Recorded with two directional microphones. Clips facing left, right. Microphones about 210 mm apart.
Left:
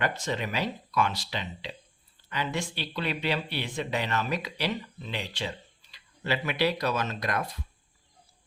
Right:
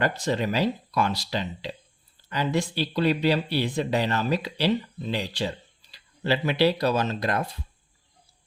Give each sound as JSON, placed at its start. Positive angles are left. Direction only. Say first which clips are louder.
{"t": 0.0, "sound": "speech", "louder": "right 5 dB", "side_deg": -35}